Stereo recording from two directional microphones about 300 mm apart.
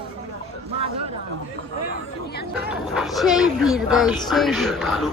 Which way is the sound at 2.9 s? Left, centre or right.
Centre.